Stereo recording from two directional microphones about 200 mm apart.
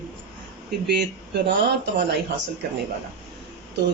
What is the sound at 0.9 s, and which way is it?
Speech, 60° right (ahead or behind).